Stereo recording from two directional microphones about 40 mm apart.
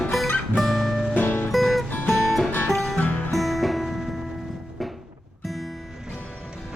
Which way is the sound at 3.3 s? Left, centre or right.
Centre.